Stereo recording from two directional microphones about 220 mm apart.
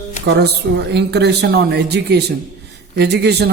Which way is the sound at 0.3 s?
50° right (ahead or behind).